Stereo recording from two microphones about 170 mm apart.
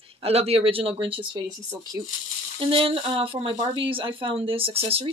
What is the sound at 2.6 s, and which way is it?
Speech, 30° right (ahead or behind).